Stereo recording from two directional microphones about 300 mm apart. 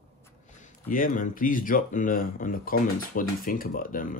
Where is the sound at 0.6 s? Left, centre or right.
Left.